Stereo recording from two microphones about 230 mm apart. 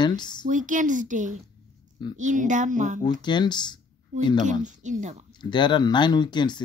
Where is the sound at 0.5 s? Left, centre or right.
Right.